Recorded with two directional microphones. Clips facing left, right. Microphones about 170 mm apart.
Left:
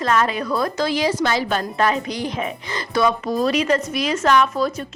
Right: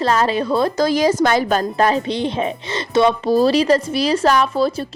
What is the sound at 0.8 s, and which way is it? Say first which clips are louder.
Speech: right 5 dB; 45° right (ahead or behind).